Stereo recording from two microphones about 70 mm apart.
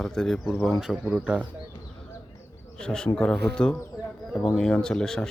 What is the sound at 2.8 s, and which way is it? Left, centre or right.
Speech, centre.